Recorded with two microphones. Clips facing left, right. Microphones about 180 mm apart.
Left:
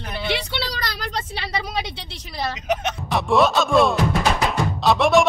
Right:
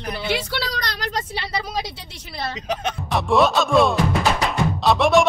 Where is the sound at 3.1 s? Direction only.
Centre (ahead or behind).